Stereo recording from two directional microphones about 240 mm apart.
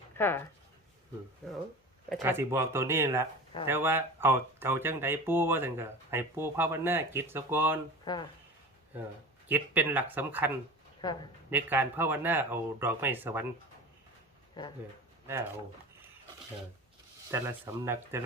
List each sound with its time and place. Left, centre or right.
0.2 s speech: centre
2.2 s speech: centre
8.0 s speech: centre
9.5 s speech: centre
11.0 s speech: centre
11.5 s speech: centre
14.6 s speech: centre
15.3 s speech: centre
17.3 s speech: centre